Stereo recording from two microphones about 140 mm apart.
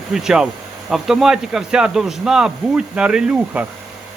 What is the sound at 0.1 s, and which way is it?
Speech, 5° right (ahead or behind).